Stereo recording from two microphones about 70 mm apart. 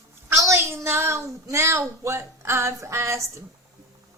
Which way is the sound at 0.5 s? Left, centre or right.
Right.